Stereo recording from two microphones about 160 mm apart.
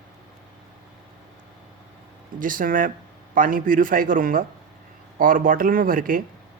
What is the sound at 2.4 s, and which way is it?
Speech, 60° right (ahead or behind).